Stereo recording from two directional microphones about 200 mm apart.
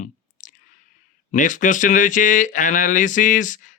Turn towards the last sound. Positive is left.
turn(degrees=40)  # may be behind; listen again after turning